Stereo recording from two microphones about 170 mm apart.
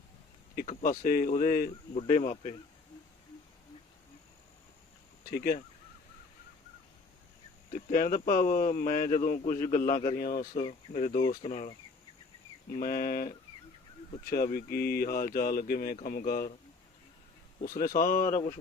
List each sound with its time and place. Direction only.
0.6 s speech: 50° left (ahead or behind)
5.3 s speech: 60° left (ahead or behind)
7.7 s speech: 50° left (ahead or behind)
12.7 s speech: 55° left (ahead or behind)
17.7 s speech: 60° left (ahead or behind)